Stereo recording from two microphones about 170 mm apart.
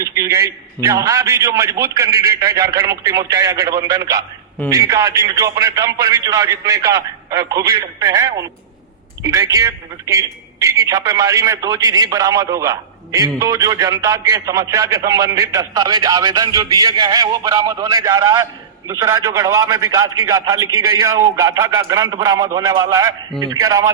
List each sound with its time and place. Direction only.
0.0 s a man's voice: 15° right (ahead or behind)